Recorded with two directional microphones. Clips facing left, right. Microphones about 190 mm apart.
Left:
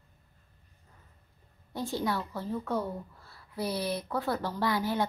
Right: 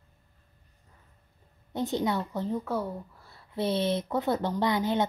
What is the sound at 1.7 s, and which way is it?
Speech, 20° right (ahead or behind).